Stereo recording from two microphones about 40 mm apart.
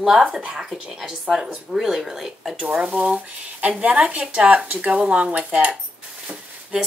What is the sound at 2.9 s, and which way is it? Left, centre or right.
Speech, right.